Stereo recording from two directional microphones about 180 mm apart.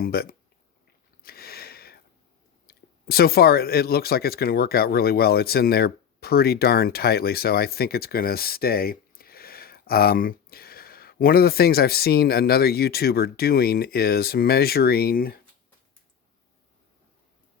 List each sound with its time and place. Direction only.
0.0 s speech: 55° left (ahead or behind)
1.2 s a sound: 55° left (ahead or behind)
2.6 s speech: 60° left (ahead or behind)